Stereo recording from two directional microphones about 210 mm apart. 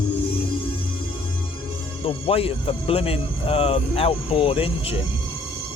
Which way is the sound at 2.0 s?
25° left (ahead or behind).